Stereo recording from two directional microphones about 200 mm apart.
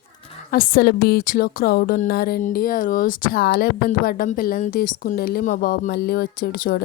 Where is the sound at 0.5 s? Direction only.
45° left (ahead or behind).